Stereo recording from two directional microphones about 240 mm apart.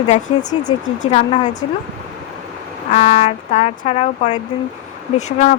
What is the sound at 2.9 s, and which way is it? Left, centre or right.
Speech, left.